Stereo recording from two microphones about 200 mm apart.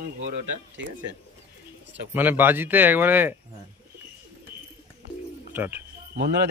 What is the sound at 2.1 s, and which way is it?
Speech, 10° right (ahead or behind).